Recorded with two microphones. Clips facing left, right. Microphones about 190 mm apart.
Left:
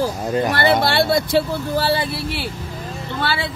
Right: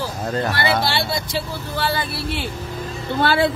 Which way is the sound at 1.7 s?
35° left (ahead or behind).